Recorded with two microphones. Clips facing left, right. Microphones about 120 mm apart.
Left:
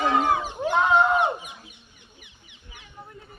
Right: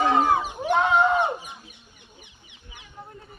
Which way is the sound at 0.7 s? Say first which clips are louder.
Even; centre (ahead or behind).